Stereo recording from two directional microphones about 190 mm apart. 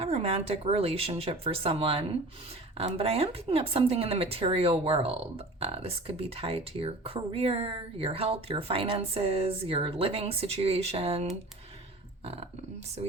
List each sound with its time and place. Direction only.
0.0 s speech: 30° right (ahead or behind)